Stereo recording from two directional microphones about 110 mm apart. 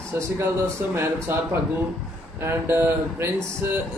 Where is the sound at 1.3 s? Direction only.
20° right (ahead or behind).